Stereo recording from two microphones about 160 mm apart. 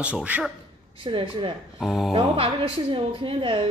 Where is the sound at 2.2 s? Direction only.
35° right (ahead or behind).